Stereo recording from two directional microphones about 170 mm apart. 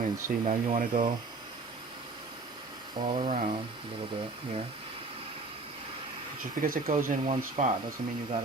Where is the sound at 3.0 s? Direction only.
30° right (ahead or behind).